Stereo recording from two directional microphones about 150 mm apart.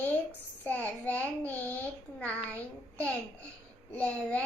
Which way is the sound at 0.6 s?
10° left (ahead or behind).